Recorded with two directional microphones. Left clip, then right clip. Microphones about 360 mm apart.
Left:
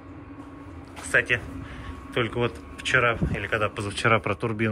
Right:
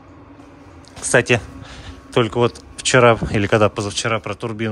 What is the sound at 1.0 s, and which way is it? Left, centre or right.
A man's voice, centre.